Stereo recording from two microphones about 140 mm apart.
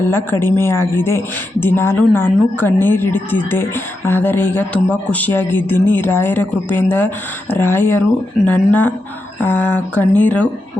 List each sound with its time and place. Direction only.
0.1 s speech: 15° left (ahead or behind)